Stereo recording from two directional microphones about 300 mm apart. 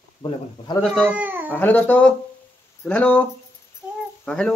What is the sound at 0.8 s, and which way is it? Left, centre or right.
Speech, centre.